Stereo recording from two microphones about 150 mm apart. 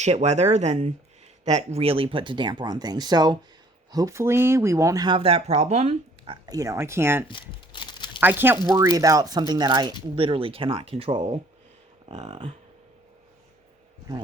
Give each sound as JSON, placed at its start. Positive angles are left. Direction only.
{"t": 0.0, "sound": "speech", "side_deg": -50}
{"t": 6.4, "sound": "speech", "side_deg": -20}
{"t": 7.3, "sound": "crumpling", "side_deg": 35}
{"t": 8.2, "sound": "speech", "side_deg": -15}